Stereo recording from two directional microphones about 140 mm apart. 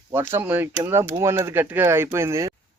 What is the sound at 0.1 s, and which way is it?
Speech, 15° right (ahead or behind).